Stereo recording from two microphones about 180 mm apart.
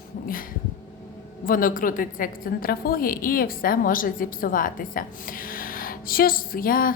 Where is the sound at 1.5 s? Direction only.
50° left (ahead or behind).